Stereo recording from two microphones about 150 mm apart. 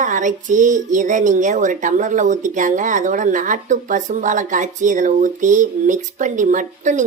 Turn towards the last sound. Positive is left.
turn(degrees=-55)  # may be behind; listen again after turning